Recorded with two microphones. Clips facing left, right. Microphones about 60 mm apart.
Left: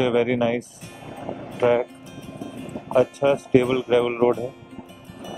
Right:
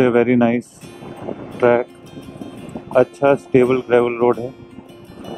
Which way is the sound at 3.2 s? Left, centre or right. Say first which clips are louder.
Right 5 dB; right.